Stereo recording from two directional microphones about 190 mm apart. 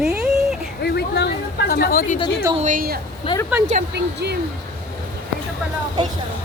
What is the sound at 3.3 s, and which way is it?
Speech, 30° left (ahead or behind).